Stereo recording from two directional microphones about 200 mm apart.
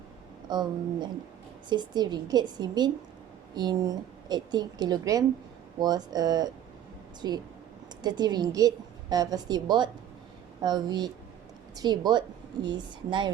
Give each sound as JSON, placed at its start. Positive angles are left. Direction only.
{"t": 0.4, "sound": "a woman's voice", "side_deg": -20}